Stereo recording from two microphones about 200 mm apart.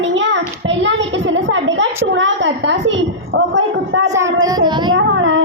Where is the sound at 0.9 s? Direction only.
70° right (ahead or behind).